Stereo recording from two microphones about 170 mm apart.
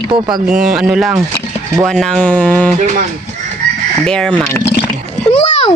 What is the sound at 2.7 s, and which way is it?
Speech, 45° right (ahead or behind).